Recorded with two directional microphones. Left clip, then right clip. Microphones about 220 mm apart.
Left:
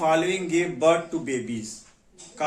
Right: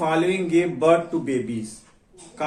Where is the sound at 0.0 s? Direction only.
20° left (ahead or behind).